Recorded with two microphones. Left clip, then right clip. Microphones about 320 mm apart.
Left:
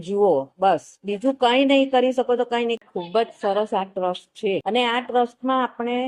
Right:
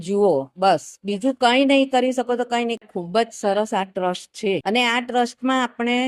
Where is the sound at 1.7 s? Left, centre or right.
Right.